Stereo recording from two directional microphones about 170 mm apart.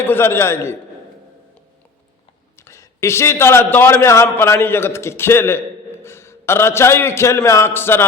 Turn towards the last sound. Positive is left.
turn(degrees=15)  # may be behind; listen again after turning